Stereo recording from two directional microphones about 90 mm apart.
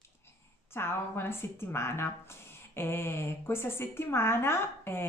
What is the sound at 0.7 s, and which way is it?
A woman's voice, 25° left (ahead or behind).